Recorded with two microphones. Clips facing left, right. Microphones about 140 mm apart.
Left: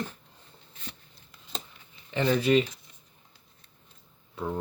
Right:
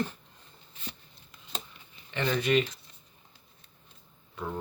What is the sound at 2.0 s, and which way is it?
Speech, 35° left (ahead or behind).